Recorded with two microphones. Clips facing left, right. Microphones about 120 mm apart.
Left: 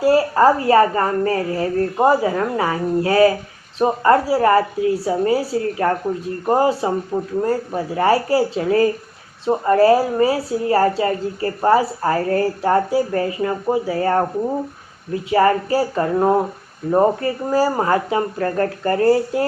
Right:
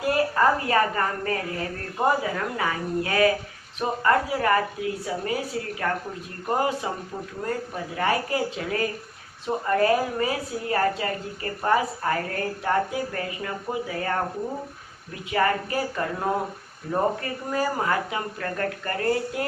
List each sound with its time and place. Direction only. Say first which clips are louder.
0.0 s a woman's voice: left 8 dB; 30° left (ahead or behind)
7.1 s speech: left 12 dB; 55° left (ahead or behind)
7.4 s a woman's voice: left 9 dB; 35° left (ahead or behind)